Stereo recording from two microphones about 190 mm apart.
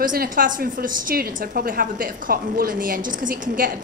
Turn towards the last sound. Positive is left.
turn(degrees=-50)  # may be behind; listen again after turning